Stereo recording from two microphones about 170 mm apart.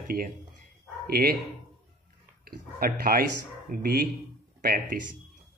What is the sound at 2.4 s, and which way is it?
Speech, 60° right (ahead or behind).